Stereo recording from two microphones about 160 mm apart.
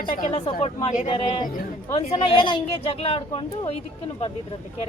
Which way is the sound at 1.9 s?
35° left (ahead or behind).